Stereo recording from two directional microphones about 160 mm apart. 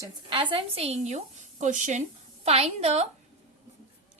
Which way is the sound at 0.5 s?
40° right (ahead or behind).